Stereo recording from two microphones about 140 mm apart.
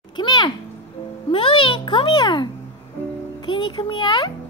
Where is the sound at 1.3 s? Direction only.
35° left (ahead or behind).